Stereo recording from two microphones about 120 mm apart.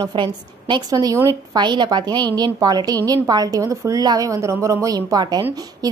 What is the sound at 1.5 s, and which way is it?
A woman's voice, 40° right (ahead or behind).